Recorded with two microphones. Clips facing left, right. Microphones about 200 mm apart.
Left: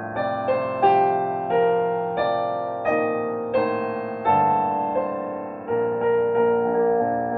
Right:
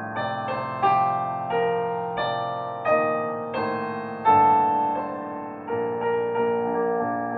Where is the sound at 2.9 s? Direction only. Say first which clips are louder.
Even; 45° left (ahead or behind).